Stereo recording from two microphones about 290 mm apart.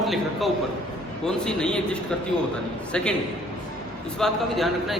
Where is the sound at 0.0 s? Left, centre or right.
Centre.